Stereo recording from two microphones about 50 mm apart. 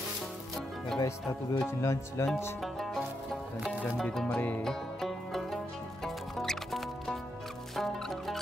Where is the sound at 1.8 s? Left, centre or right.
Left.